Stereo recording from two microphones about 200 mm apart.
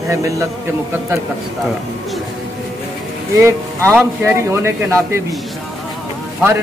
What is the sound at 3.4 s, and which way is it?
A man's voice, 15° right (ahead or behind).